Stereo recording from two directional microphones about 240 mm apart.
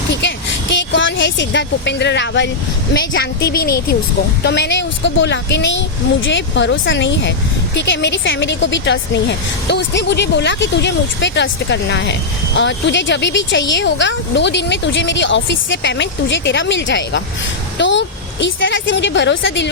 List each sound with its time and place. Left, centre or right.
0.1 s vehicle: left
2.9 s a woman's voice: left